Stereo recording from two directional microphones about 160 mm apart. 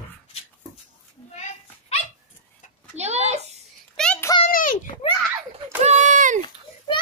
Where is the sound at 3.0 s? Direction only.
45° right (ahead or behind).